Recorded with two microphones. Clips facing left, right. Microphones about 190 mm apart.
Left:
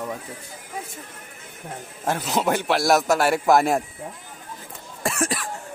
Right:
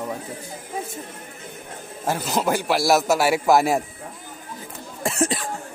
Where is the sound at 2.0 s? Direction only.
Centre (ahead or behind).